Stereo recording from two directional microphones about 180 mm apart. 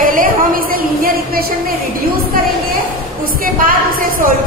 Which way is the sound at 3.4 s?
50° right (ahead or behind).